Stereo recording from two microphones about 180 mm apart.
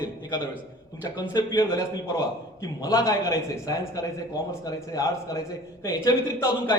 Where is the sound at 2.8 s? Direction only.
20° left (ahead or behind).